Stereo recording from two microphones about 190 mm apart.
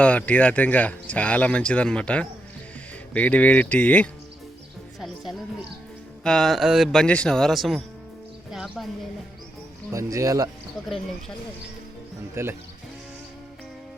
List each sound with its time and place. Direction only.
0.0 s speech: 5° left (ahead or behind)
4.9 s music: centre (ahead or behind)
6.2 s speech: 5° left (ahead or behind)
9.9 s speech: 15° right (ahead or behind)
12.3 s speech: 10° right (ahead or behind)